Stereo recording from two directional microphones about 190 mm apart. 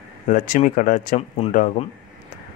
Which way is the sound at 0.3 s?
40° left (ahead or behind).